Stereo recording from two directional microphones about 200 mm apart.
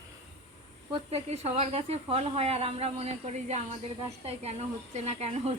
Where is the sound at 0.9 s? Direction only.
30° right (ahead or behind).